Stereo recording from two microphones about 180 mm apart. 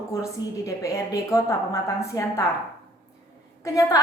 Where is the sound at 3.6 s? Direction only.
15° left (ahead or behind).